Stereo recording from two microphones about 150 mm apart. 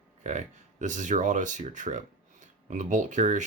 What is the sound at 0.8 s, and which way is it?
Speech, 55° right (ahead or behind).